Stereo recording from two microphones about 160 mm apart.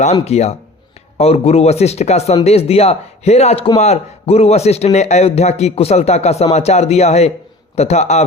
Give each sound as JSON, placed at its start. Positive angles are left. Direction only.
{"t": 0.0, "sound": "a man's voice", "side_deg": 40}